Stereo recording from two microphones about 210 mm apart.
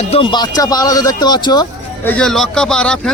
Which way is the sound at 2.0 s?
5° left (ahead or behind).